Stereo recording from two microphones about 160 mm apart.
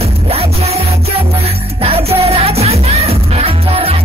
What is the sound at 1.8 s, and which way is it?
Music, 40° right (ahead or behind).